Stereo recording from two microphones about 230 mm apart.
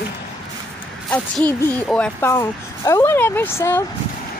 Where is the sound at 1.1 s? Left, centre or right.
Centre.